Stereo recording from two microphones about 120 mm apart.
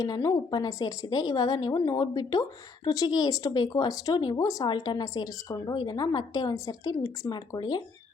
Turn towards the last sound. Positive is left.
turn(degrees=35)  # may be behind; listen again after turning